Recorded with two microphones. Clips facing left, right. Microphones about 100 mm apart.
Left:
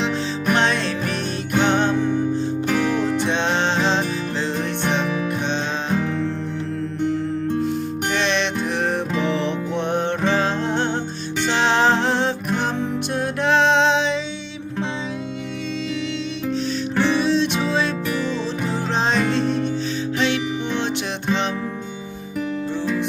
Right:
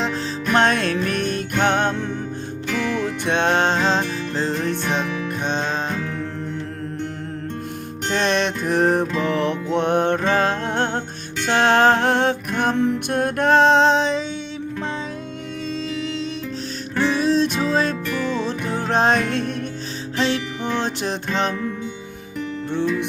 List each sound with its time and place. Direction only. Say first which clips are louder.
0.5 s music: right 4 dB; 50° right (ahead or behind)
3.2 s music: right 2 dB; 55° right (ahead or behind)
5.0 s music: left 3 dB; 10° left (ahead or behind)
8.1 s music: right 3 dB; 45° right (ahead or behind)
17.0 s music: right 1 dB; 40° right (ahead or behind)
18.3 s music: even; 55° right (ahead or behind)
20.1 s music: right 1 dB; 35° right (ahead or behind)
22.7 s music: right 4 dB; 60° right (ahead or behind)